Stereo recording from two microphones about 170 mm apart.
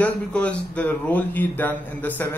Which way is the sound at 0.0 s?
5° left (ahead or behind).